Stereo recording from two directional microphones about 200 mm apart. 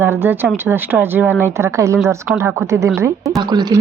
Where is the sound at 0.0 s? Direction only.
10° right (ahead or behind).